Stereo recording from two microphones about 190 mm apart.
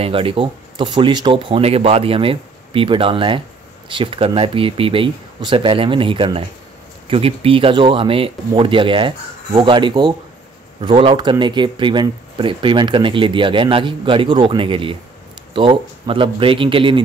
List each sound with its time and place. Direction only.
0.0 s speech: 30° right (ahead or behind)